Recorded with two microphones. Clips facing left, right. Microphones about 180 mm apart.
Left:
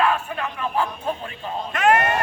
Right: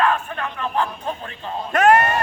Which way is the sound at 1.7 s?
45° right (ahead or behind).